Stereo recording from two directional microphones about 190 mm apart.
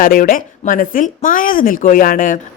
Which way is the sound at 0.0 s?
50° left (ahead or behind).